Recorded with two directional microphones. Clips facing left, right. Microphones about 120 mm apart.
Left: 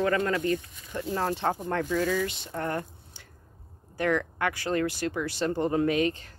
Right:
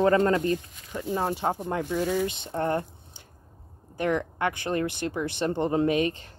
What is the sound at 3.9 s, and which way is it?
Speech, 20° right (ahead or behind).